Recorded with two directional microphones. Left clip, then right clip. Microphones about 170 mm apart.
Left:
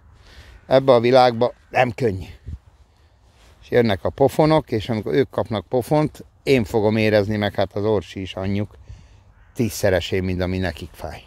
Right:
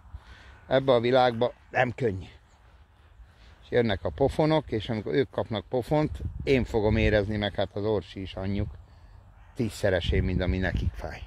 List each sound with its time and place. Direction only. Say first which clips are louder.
0.7 s speech: left 8 dB; 50° left (ahead or behind)
3.6 s speech: left 7 dB; 55° left (ahead or behind); by 11.2 s 35° left (ahead or behind)